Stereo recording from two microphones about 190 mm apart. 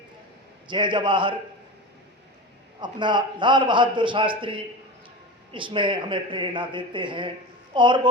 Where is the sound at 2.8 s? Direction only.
25° right (ahead or behind).